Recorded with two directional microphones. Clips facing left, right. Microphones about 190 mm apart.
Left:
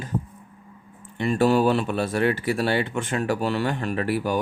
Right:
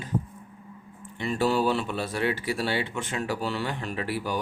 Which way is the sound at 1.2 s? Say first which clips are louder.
Left 5 dB; 55° left (ahead or behind).